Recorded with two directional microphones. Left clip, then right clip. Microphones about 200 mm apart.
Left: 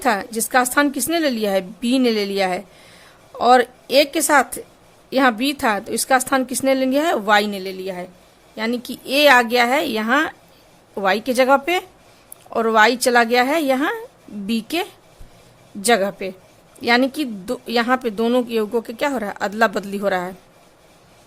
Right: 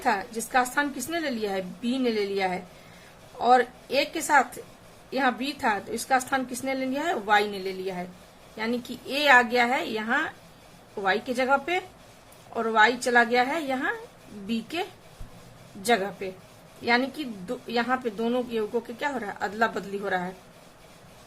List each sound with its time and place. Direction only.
0.0 s speech: 55° left (ahead or behind)